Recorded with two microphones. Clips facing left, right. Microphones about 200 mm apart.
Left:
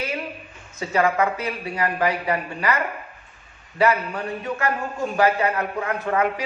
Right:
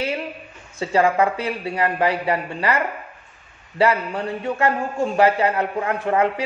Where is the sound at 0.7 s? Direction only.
30° right (ahead or behind).